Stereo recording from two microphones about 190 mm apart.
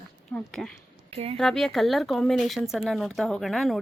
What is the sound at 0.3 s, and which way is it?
Speech, 5° left (ahead or behind).